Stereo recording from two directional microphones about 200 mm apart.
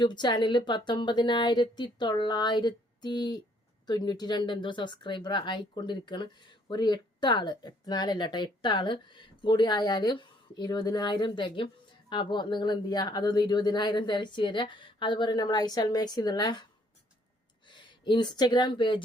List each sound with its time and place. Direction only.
0.0 s speech: 20° left (ahead or behind)
17.7 s speech: 25° left (ahead or behind)